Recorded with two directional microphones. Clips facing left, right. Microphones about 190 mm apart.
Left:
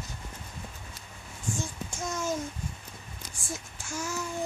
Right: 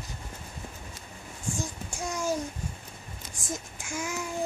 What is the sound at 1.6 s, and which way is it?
Child singing, 15° right (ahead or behind).